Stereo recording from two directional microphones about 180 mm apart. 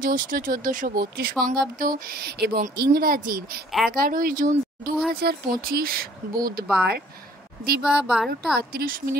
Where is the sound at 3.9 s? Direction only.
55° right (ahead or behind).